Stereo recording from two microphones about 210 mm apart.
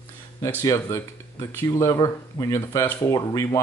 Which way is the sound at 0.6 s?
15° left (ahead or behind).